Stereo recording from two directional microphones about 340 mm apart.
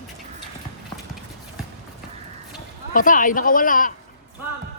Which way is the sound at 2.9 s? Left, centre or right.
Left.